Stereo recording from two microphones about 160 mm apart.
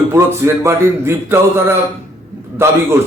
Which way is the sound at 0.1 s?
15° right (ahead or behind).